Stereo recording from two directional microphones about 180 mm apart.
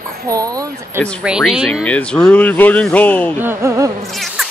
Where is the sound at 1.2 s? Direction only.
5° right (ahead or behind).